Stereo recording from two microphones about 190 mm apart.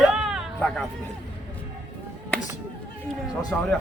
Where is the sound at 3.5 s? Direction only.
10° left (ahead or behind).